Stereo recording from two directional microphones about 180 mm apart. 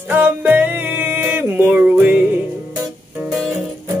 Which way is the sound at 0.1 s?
10° right (ahead or behind).